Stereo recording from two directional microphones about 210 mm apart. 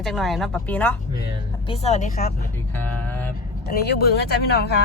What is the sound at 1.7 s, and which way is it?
Speech, 30° left (ahead or behind).